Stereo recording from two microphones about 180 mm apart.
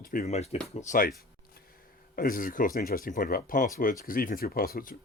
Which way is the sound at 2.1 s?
50° left (ahead or behind).